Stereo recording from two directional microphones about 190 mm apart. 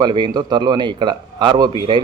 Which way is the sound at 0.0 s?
25° right (ahead or behind).